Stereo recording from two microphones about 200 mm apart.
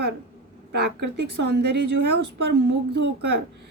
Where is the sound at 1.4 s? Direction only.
55° right (ahead or behind).